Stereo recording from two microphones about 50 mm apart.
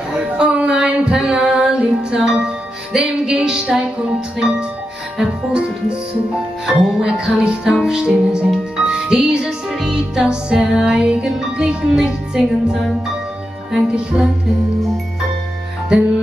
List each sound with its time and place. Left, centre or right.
0.1 s female singing: centre
3.3 s music: centre